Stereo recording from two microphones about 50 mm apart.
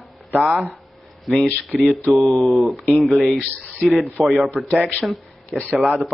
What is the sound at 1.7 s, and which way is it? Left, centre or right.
Speech, centre.